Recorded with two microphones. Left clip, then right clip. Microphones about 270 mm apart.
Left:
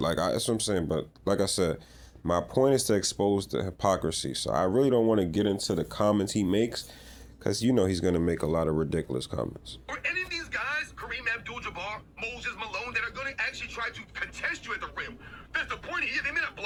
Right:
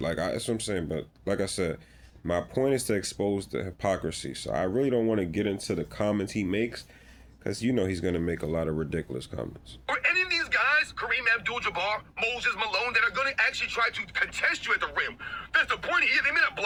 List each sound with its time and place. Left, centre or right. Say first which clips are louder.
0.0 s speech: left 2 dB; centre
9.8 s speech: right 6 dB; right